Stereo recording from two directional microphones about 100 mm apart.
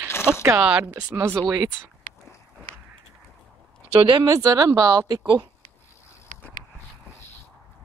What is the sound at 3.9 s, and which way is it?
Speech, 55° right (ahead or behind).